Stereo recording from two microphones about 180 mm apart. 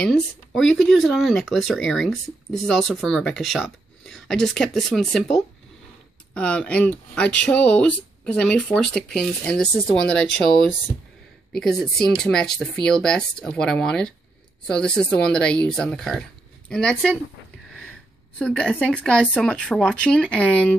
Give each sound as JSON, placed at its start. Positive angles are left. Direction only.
{"t": 0.0, "sound": "speech", "side_deg": 5}
{"t": 11.5, "sound": "speech", "side_deg": 0}
{"t": 18.4, "sound": "speech", "side_deg": 5}